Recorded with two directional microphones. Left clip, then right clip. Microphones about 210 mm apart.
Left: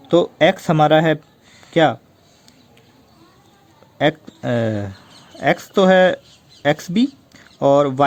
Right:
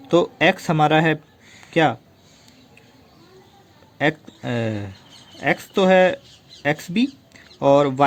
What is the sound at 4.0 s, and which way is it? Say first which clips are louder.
Speech: left 3 dB; 15° left (ahead or behind).